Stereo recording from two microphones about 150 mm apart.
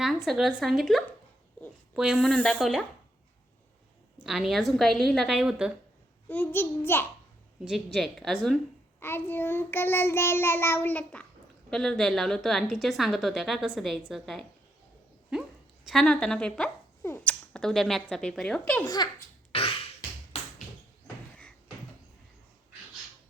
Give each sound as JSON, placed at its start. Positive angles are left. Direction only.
{"t": 0.3, "sound": "a woman's voice", "side_deg": 0}
{"t": 2.3, "sound": "child singing", "side_deg": 10}
{"t": 4.2, "sound": "a woman's voice", "side_deg": 0}
{"t": 6.2, "sound": "child singing", "side_deg": 10}
{"t": 7.9, "sound": "a woman's voice", "side_deg": 0}
{"t": 9.0, "sound": "child singing", "side_deg": 15}
{"t": 11.7, "sound": "a woman's voice", "side_deg": 5}
{"t": 19.5, "sound": "a sound", "side_deg": 40}